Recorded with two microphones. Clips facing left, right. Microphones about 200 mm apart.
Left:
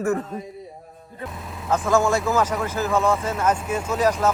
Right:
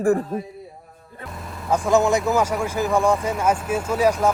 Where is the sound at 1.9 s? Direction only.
20° right (ahead or behind).